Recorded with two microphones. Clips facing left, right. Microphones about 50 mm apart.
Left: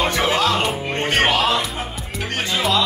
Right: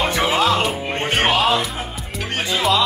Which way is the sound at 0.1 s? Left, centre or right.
Centre.